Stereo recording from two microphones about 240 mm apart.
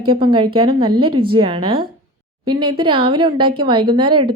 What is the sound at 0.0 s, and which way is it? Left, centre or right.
Speech, right.